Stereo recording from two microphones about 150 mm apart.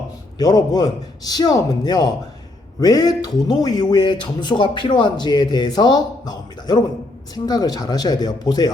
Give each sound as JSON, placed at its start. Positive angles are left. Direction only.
{"t": 0.3, "sound": "speech", "side_deg": 25}